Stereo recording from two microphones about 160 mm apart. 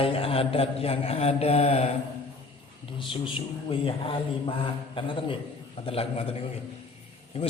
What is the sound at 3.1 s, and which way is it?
A man's voice, 35° left (ahead or behind).